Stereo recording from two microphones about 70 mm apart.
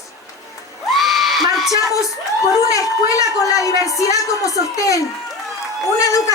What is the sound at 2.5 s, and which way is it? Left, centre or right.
Speech, left.